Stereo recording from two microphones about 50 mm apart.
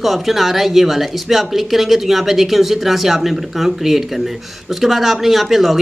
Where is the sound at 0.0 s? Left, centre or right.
Centre.